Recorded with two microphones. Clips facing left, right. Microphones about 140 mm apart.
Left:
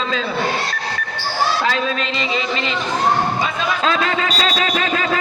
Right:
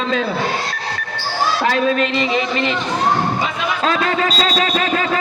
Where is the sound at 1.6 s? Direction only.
50° right (ahead or behind).